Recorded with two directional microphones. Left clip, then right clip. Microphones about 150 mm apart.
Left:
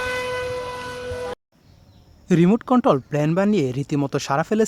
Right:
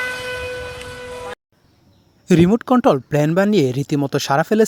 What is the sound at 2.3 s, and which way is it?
Speech, 30° right (ahead or behind).